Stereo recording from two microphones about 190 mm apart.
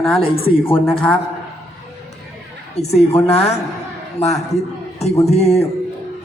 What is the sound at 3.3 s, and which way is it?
A woman's voice, 35° left (ahead or behind).